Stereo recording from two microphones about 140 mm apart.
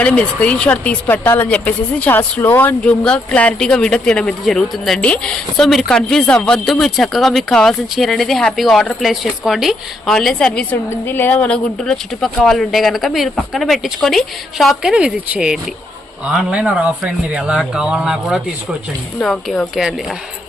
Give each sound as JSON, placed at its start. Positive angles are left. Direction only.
{"t": 0.0, "sound": "a woman's voice", "side_deg": 10}